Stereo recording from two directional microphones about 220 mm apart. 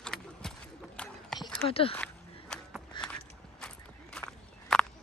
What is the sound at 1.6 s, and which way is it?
Speech, 25° left (ahead or behind).